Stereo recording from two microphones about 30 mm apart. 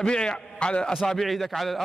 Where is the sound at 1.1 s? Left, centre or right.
Centre.